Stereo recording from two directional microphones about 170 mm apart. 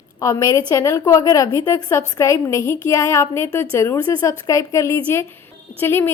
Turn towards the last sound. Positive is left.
turn(degrees=15)  # may be behind; listen again after turning